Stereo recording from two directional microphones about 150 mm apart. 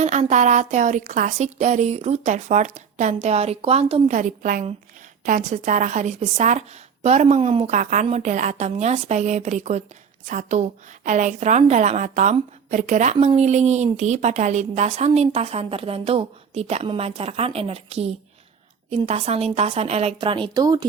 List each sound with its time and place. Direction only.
0.0 s a woman's voice: 50° right (ahead or behind)
4.1 s a woman's voice: 60° right (ahead or behind); by 7.8 s 40° right (ahead or behind)
7.8 s a woman's voice: 60° right (ahead or behind); by 20.8 s 25° right (ahead or behind)